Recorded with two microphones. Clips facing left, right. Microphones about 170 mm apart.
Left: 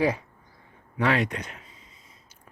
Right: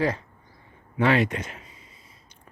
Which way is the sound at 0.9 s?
Centre (ahead or behind).